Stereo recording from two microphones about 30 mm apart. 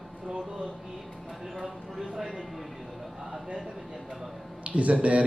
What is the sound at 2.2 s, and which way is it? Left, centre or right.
Speech, right.